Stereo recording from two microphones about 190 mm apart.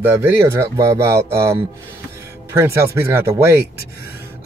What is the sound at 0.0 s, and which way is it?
Speech, 10° right (ahead or behind).